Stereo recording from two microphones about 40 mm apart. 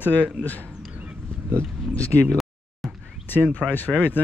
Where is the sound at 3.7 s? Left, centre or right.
Left.